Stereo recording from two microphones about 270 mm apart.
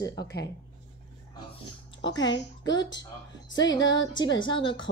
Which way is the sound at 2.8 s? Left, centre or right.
Centre.